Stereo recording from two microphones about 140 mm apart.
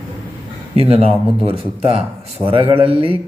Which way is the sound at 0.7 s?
45° right (ahead or behind).